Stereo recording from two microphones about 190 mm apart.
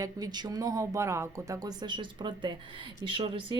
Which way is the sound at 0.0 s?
20° right (ahead or behind).